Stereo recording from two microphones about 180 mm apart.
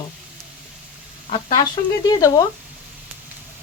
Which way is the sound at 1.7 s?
20° left (ahead or behind).